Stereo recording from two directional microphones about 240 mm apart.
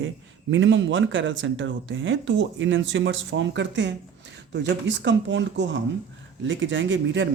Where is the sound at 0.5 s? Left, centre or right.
Right.